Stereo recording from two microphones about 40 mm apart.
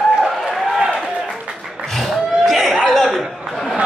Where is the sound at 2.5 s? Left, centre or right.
Centre.